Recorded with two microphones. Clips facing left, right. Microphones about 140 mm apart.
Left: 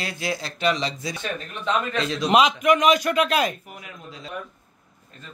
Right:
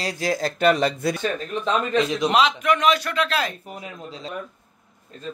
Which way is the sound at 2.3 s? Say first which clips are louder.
Left 4 dB; 10° left (ahead or behind).